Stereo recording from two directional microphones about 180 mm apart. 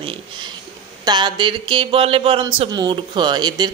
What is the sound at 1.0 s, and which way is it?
Speech, 25° right (ahead or behind).